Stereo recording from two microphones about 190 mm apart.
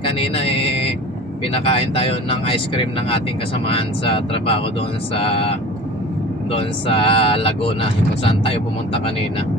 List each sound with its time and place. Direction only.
0.0 s speech: 30° left (ahead or behind)